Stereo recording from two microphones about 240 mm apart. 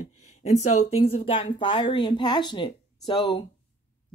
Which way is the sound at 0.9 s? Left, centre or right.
Left.